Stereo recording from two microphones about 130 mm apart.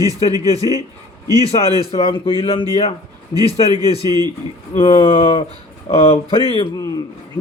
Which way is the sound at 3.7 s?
30° right (ahead or behind).